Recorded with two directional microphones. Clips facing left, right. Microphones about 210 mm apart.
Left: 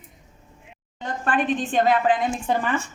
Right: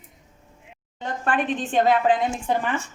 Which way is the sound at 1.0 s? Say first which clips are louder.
Left 1 dB; 25° right (ahead or behind).